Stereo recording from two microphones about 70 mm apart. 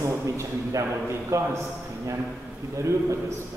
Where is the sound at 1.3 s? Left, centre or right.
Right.